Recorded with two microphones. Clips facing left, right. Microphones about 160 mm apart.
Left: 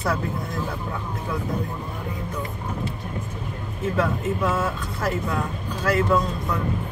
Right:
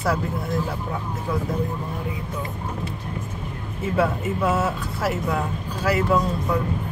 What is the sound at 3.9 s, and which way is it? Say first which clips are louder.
Speech: right 2 dB; 10° right (ahead or behind).